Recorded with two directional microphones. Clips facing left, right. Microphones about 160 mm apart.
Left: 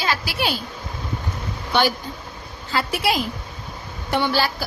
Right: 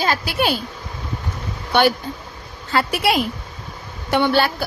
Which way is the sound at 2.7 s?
60° right (ahead or behind).